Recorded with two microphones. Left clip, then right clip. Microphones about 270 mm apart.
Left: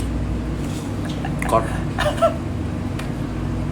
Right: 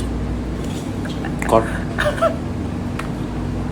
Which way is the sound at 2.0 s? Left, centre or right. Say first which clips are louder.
Even; centre.